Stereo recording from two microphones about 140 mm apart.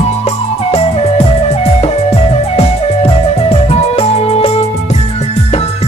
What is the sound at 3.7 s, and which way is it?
Music, 45° left (ahead or behind).